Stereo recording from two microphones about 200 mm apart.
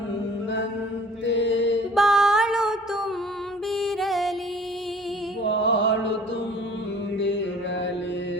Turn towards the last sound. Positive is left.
turn(degrees=65)  # may be behind; listen again after turning